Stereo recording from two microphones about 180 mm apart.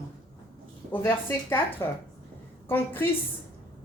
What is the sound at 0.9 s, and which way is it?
Speech, 10° left (ahead or behind).